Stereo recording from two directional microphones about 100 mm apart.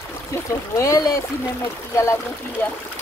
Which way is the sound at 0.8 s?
35° left (ahead or behind).